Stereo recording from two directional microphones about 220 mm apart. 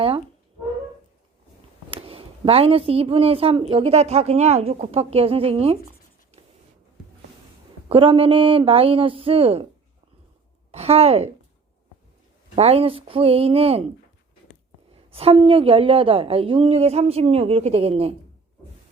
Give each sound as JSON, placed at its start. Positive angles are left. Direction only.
{"t": 1.9, "sound": "speech", "side_deg": -25}
{"t": 7.9, "sound": "speech", "side_deg": -25}
{"t": 10.7, "sound": "a woman's voice", "side_deg": -25}
{"t": 12.5, "sound": "speech", "side_deg": -25}
{"t": 14.9, "sound": "speech", "side_deg": -25}